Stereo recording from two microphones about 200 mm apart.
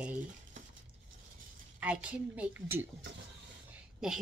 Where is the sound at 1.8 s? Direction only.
5° right (ahead or behind).